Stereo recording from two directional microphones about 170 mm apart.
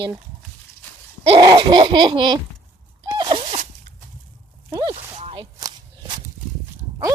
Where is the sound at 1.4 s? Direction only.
25° right (ahead or behind).